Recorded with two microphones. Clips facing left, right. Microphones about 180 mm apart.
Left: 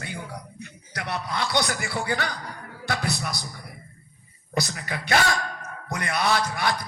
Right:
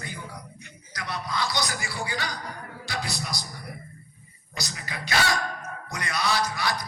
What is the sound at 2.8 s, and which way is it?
Music, 60° left (ahead or behind).